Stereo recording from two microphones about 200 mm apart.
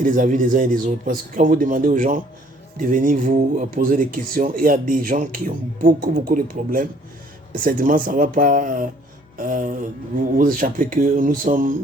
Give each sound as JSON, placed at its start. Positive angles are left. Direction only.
{"t": 0.0, "sound": "speech", "side_deg": -40}